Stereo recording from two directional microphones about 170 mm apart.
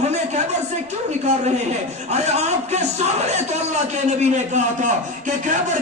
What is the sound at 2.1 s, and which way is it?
Speech, 40° right (ahead or behind).